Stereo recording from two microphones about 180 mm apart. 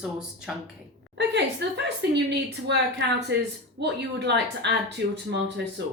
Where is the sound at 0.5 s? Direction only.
Centre (ahead or behind).